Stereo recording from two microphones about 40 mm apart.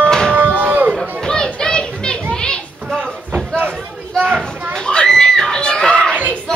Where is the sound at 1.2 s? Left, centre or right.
Left.